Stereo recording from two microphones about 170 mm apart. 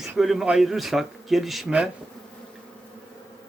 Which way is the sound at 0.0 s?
Centre (ahead or behind).